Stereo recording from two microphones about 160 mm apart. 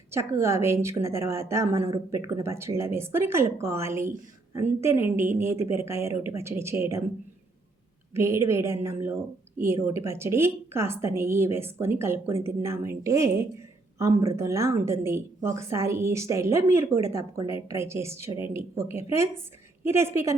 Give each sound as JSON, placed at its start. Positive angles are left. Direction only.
{"t": 0.1, "sound": "a woman's voice", "side_deg": -15}
{"t": 8.1, "sound": "a woman's voice", "side_deg": -15}